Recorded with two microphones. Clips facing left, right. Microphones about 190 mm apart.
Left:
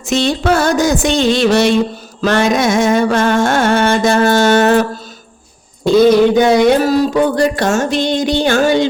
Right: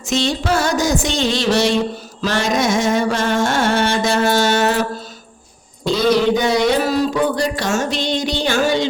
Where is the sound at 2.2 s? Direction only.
55° left (ahead or behind).